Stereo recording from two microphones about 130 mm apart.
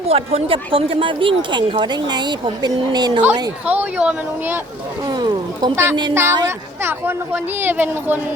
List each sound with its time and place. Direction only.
0.1 s speech: 45° right (ahead or behind)
3.7 s speech: 10° right (ahead or behind)
5.7 s speech: 20° right (ahead or behind)